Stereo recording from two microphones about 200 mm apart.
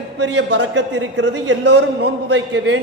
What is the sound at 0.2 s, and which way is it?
A man's voice, 60° right (ahead or behind).